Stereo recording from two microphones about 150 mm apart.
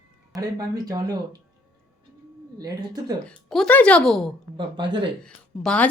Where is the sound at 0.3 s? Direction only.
25° right (ahead or behind).